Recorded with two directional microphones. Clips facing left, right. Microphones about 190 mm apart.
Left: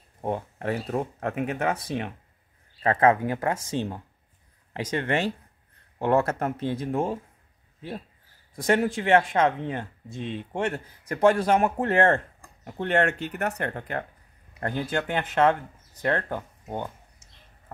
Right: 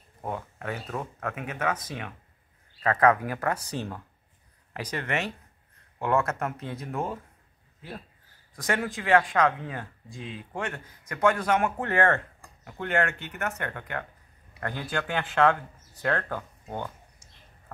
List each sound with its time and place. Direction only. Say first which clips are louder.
0.2 s speech: left 5 dB; 30° left (ahead or behind)
8.5 s speech: left 6 dB; 25° left (ahead or behind)
14.6 s speech: left 4 dB; 25° left (ahead or behind)